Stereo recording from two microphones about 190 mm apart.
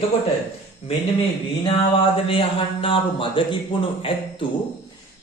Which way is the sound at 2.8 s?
25° left (ahead or behind).